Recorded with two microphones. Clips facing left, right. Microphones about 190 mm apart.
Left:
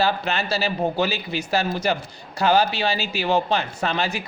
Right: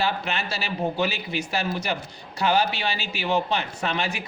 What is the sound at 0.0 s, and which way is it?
A man's voice, 40° left (ahead or behind).